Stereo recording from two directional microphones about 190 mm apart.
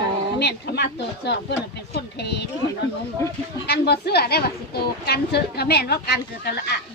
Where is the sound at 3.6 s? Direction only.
60° left (ahead or behind).